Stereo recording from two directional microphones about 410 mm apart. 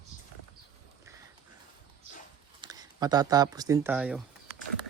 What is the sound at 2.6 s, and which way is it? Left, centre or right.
Speech, centre.